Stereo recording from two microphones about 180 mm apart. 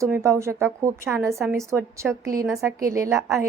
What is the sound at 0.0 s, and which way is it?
A woman's voice, 15° right (ahead or behind).